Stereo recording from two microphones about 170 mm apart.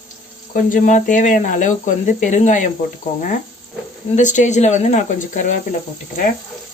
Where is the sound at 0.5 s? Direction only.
50° left (ahead or behind).